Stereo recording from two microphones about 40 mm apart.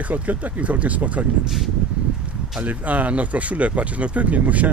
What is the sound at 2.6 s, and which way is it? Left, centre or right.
Speech, right.